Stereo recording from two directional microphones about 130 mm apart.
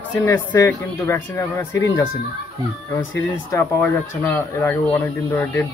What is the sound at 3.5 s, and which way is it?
Speech, 20° left (ahead or behind).